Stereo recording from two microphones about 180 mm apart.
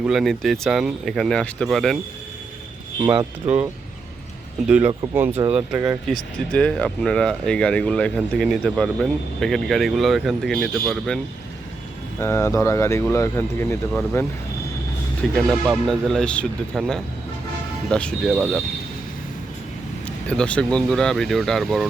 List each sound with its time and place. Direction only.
0.0 s speech: centre (ahead or behind)
3.0 s speech: 25° right (ahead or behind)
3.4 s speech: 10° right (ahead or behind)
6.5 s speech: 5° left (ahead or behind)
12.2 s speech: 15° left (ahead or behind)
15.4 s speech: centre (ahead or behind)
20.2 s speech: 5° left (ahead or behind)